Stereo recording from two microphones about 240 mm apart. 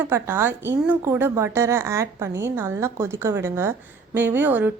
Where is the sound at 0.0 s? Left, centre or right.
Centre.